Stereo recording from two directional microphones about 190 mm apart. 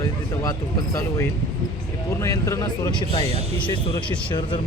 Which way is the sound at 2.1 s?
15° left (ahead or behind).